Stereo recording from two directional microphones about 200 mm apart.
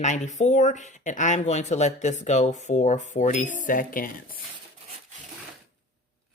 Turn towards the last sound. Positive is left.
turn(degrees=45)  # may be behind; listen again after turning